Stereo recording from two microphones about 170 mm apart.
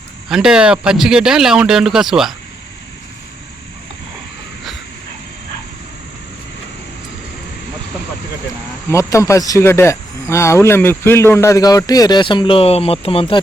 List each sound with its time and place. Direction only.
0.3 s speech: 5° right (ahead or behind)
8.9 s speech: 15° left (ahead or behind); by 13.4 s 35° left (ahead or behind)